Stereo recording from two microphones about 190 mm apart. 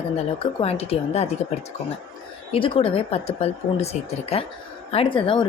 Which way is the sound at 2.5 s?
30° left (ahead or behind).